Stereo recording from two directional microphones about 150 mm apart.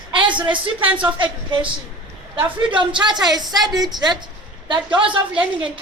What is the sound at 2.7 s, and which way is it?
A woman's voice, 30° right (ahead or behind).